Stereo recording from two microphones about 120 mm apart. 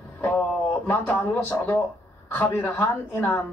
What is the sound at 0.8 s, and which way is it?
A man's voice, 15° left (ahead or behind).